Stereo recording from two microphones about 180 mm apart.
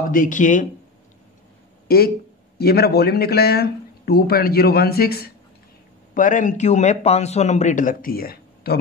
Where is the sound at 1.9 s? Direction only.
55° left (ahead or behind).